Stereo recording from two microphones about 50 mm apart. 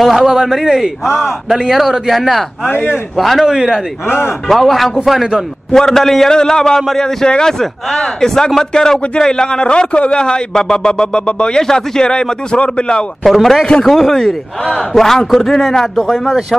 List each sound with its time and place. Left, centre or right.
0.0 s a man's voice: centre
2.6 s a man's voice: left
3.2 s a man's voice: centre
4.5 s a man's voice: centre
5.7 s a man's voice: centre
13.2 s a man's voice: centre